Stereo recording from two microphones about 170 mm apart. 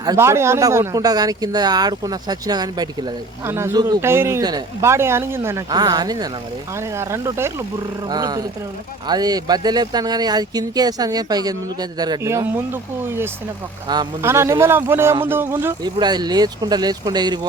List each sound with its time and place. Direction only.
0.0 s speech: 20° right (ahead or behind)
13.8 s speech: 25° right (ahead or behind)
15.6 s speech: 25° right (ahead or behind)